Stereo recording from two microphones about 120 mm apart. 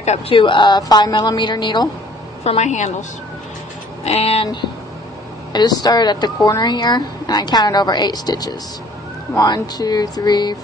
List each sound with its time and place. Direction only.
0.3 s a woman's voice: 45° left (ahead or behind)
2.4 s a woman's voice: 70° left (ahead or behind)
4.0 s a sound: 60° left (ahead or behind)
5.5 s a woman's voice: 35° left (ahead or behind)